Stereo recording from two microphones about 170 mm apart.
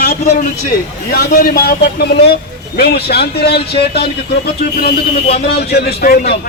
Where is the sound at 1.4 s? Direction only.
60° left (ahead or behind).